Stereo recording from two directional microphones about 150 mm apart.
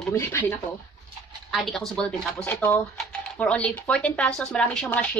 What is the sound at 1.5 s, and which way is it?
Speech, centre (ahead or behind).